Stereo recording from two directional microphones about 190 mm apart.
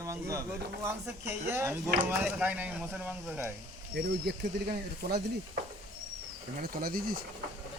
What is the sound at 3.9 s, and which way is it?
Speech, 60° right (ahead or behind).